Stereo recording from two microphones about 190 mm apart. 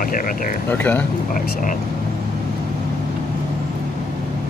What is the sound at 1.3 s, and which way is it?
Speech, 45° left (ahead or behind).